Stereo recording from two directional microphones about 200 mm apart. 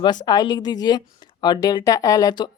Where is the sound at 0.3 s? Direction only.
20° left (ahead or behind).